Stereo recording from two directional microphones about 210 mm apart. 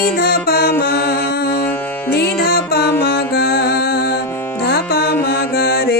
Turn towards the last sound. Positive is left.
turn(degrees=45)  # may be behind; listen again after turning